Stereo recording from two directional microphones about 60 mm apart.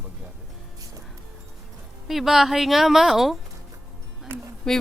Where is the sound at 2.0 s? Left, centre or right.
Centre.